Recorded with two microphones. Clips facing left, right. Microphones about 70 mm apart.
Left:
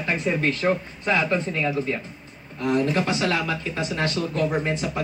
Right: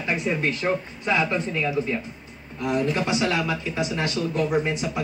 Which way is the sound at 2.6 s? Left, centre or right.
Centre.